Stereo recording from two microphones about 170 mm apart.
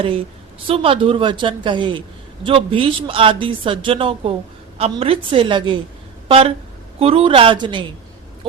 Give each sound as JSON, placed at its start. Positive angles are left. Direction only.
{"t": 0.7, "sound": "a woman's voice", "side_deg": -30}